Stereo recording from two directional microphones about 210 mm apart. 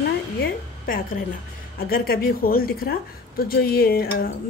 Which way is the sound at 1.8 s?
45° left (ahead or behind).